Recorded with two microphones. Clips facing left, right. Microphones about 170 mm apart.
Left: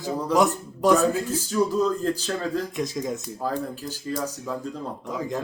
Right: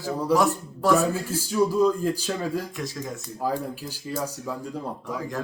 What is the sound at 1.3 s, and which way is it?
Speech, 10° right (ahead or behind).